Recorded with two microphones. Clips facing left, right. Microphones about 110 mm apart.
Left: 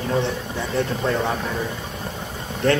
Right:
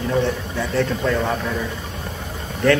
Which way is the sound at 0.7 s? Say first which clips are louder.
Right 2 dB; 25° left (ahead or behind).